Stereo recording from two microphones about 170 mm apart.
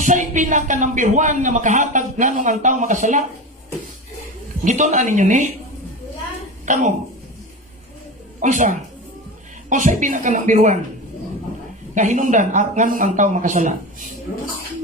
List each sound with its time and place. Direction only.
0.0 s speech: 50° right (ahead or behind)
4.6 s speech: 45° right (ahead or behind)
6.7 s speech: 45° right (ahead or behind)
8.4 s speech: 50° right (ahead or behind)
11.9 s speech: 45° right (ahead or behind)